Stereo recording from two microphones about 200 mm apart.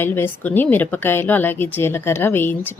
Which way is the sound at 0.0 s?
10° left (ahead or behind).